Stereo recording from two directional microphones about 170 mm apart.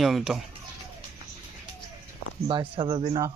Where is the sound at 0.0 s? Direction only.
Centre (ahead or behind).